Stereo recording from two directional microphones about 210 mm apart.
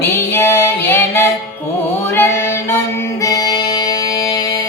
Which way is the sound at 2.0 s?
10° left (ahead or behind).